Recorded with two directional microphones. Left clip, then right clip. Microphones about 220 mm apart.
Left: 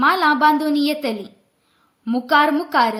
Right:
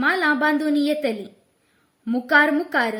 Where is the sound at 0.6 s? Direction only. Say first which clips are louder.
Left 1 dB; 5° left (ahead or behind).